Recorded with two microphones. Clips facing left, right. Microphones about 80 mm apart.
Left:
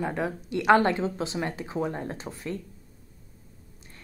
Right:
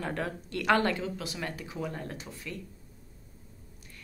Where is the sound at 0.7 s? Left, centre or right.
Left.